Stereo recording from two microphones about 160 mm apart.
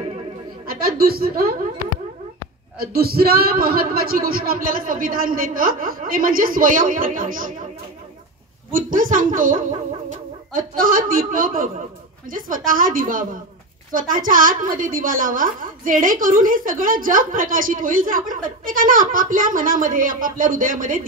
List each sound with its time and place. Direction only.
0.8 s a woman's voice: 70° right (ahead or behind)
2.8 s a woman's voice: 75° right (ahead or behind); by 7.5 s 60° right (ahead or behind)
8.7 s a woman's voice: 60° right (ahead or behind)